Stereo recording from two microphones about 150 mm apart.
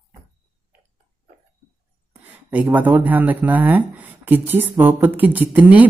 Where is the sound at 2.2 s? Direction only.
10° right (ahead or behind).